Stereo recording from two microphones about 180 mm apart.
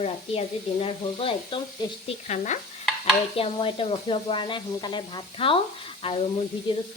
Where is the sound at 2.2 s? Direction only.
40° left (ahead or behind).